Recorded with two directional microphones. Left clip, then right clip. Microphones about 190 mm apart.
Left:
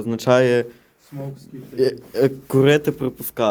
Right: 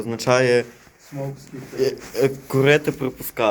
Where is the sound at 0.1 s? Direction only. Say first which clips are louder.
Left 1 dB; 55° left (ahead or behind).